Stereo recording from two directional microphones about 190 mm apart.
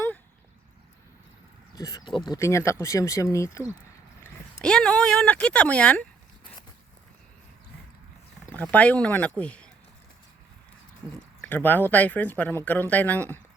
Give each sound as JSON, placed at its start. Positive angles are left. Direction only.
{"t": 1.7, "sound": "speech", "side_deg": 20}
{"t": 4.6, "sound": "speech", "side_deg": 5}
{"t": 8.7, "sound": "speech", "side_deg": 5}
{"t": 11.3, "sound": "speech", "side_deg": 10}